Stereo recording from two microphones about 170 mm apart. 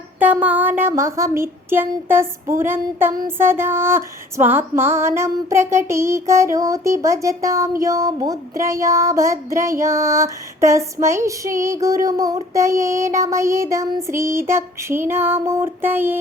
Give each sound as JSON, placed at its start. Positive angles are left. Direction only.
{"t": 0.2, "sound": "child singing", "side_deg": -10}